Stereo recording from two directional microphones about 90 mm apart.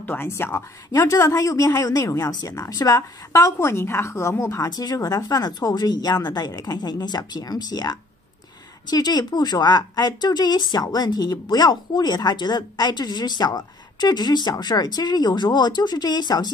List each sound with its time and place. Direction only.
0.0 s speech: 20° left (ahead or behind)
0.9 s speech: 40° left (ahead or behind)
4.6 s a woman's voice: 45° left (ahead or behind)